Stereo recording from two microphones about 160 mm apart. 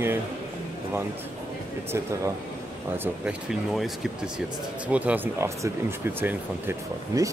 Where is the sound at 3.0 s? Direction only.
5° right (ahead or behind).